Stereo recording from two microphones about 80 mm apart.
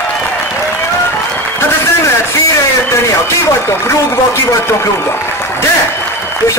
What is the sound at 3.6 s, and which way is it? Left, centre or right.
Speech, left.